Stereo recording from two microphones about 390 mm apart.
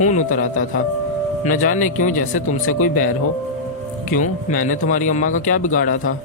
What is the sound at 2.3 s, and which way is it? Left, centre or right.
Speech, left.